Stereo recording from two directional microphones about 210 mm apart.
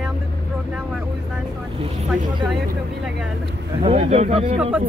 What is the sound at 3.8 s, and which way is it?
Speech, 30° right (ahead or behind).